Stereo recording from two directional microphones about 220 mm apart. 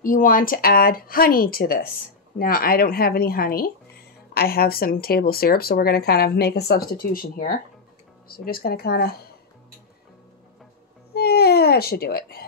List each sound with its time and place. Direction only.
0.0 s speech: 40° left (ahead or behind)
11.1 s baby cry: 45° left (ahead or behind)